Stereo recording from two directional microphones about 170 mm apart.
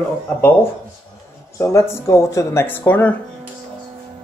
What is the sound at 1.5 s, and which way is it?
Speech, 15° left (ahead or behind).